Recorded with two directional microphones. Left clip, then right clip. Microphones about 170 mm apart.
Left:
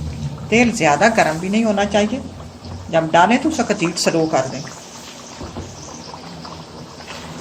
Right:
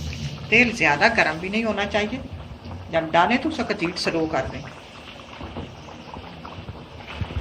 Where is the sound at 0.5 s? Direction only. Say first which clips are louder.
Left 3 dB; 60° left (ahead or behind).